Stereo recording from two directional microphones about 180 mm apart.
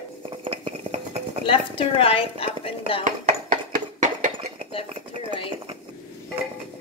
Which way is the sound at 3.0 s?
50° right (ahead or behind).